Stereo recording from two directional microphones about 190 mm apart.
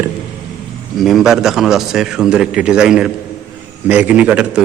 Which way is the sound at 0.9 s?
Centre (ahead or behind).